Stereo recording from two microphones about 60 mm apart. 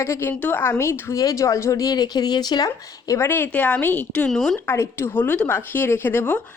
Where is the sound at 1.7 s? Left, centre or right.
Left.